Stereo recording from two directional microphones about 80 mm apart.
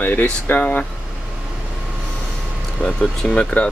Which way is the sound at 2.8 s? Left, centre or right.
Centre.